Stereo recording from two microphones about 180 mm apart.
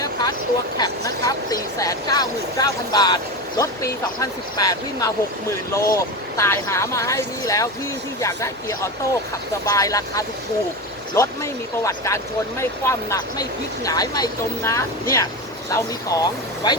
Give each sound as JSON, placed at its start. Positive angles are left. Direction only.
{"t": 0.0, "sound": "vehicle", "side_deg": 20}
{"t": 1.2, "sound": "speech", "side_deg": 20}